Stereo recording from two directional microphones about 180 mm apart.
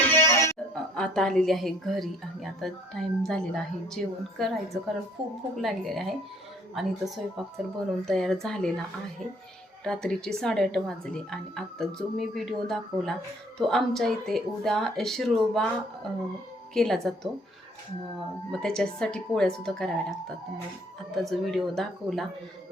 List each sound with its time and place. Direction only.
0.0 s music: 10° left (ahead or behind)
0.9 s a woman's voice: 5° left (ahead or behind)
5.2 s speech: 30° right (ahead or behind)
5.6 s a woman's voice: centre (ahead or behind)
9.8 s a woman's voice: 5° left (ahead or behind)
18.5 s a woman's voice: centre (ahead or behind)